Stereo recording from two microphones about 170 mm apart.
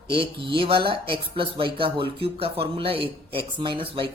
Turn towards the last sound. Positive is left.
turn(degrees=-30)  # may be behind; listen again after turning